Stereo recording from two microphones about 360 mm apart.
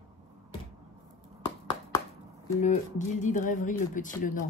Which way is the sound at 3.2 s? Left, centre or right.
Left.